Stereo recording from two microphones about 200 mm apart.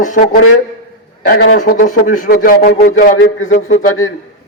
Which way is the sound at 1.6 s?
40° left (ahead or behind).